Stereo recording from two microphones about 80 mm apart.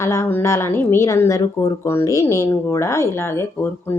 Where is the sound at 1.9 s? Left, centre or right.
Left.